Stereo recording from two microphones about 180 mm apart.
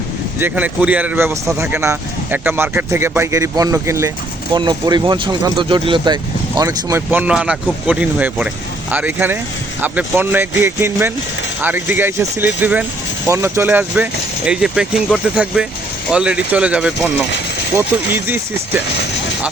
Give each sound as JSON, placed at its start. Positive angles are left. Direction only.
{"t": 0.3, "sound": "speech", "side_deg": -10}